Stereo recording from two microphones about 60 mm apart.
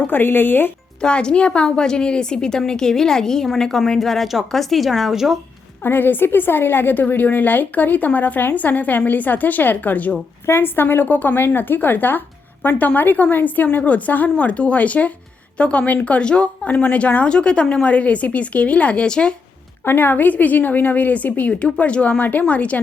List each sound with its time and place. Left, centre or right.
0.1 s a woman's voice: left
1.0 s a woman's voice: centre
5.8 s a woman's voice: left
10.4 s a woman's voice: left; by 19.4 s centre
19.8 s a woman's voice: left